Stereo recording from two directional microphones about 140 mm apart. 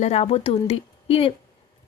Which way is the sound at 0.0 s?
45° left (ahead or behind).